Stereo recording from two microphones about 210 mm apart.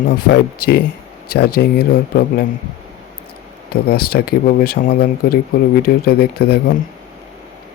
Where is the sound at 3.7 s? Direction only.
45° left (ahead or behind).